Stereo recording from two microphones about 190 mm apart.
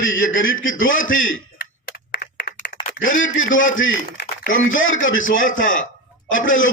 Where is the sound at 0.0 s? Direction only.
90° left.